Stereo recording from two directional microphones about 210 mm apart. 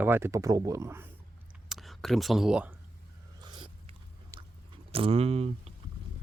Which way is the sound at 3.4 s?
20° right (ahead or behind).